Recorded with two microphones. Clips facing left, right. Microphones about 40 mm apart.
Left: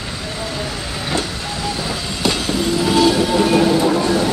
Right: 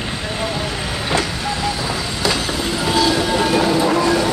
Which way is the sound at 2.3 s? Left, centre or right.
Centre.